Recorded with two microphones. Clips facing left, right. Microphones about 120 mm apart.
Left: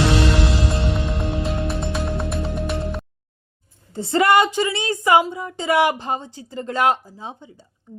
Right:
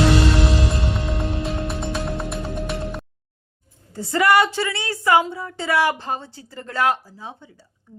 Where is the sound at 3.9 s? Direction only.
25° left (ahead or behind).